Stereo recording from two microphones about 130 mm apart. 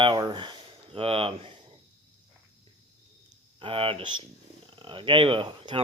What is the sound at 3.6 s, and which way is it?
Speech, 45° right (ahead or behind).